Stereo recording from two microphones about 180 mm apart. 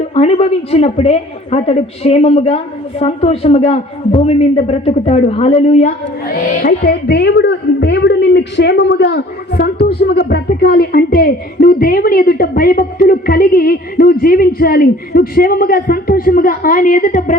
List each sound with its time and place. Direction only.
0.1 s a man's voice: 35° left (ahead or behind)
6.2 s speech: 60° left (ahead or behind)